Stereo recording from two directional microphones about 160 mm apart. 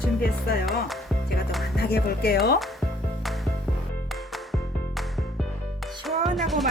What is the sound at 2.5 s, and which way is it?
Music, centre (ahead or behind).